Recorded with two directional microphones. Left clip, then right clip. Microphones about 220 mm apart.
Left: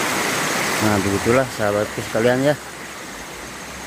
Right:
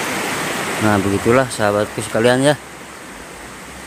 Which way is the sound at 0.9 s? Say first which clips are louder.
Right 5 dB; 25° right (ahead or behind).